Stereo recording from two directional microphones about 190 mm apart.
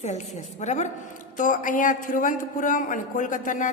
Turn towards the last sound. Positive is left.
turn(degrees=45)  # may be behind; listen again after turning